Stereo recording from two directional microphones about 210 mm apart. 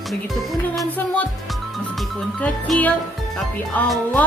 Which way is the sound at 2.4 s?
5° left (ahead or behind).